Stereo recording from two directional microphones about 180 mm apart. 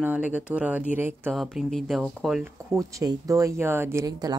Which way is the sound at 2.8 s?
20° right (ahead or behind).